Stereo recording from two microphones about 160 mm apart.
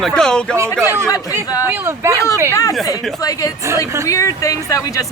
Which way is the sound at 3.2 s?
20° left (ahead or behind).